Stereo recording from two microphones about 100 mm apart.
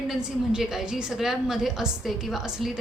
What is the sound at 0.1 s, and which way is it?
A woman's voice, 5° right (ahead or behind).